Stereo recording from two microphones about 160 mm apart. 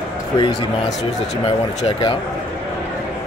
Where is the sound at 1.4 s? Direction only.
35° left (ahead or behind).